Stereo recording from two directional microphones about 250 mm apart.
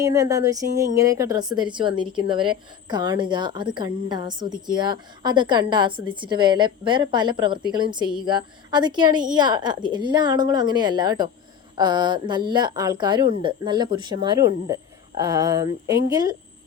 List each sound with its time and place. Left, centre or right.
0.0 s a woman's voice: centre